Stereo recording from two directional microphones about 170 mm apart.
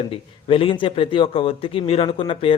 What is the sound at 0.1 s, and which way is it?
A man's voice, 30° left (ahead or behind).